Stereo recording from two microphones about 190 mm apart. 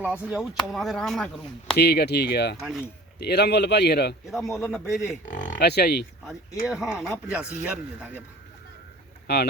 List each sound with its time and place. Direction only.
0.0 s speech: 5° right (ahead or behind)
1.7 s a man's voice: 60° left (ahead or behind)
2.6 s speech: centre (ahead or behind)
3.2 s a man's voice: 60° left (ahead or behind)
4.5 s speech: centre (ahead or behind)
5.5 s speech: 60° left (ahead or behind)
6.7 s speech: 5° right (ahead or behind)
9.2 s speech: 60° left (ahead or behind)